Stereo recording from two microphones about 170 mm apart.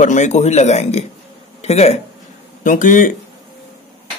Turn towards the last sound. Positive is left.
turn(degrees=50)  # may be behind; listen again after turning